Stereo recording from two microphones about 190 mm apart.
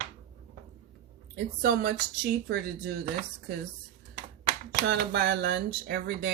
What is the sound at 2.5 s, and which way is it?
Speech, 60° right (ahead or behind).